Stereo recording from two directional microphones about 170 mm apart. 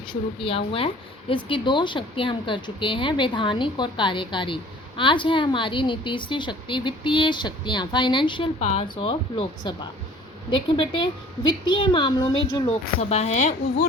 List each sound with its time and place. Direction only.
0.1 s a woman's voice: 30° left (ahead or behind)
8.5 s a woman's voice: 40° left (ahead or behind)
13.0 s speech: 40° left (ahead or behind)